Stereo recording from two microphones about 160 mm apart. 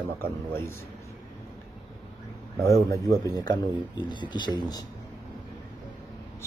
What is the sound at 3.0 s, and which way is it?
Speech, 20° left (ahead or behind).